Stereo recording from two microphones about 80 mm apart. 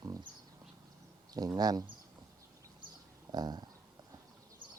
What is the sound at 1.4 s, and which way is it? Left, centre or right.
Speech, right.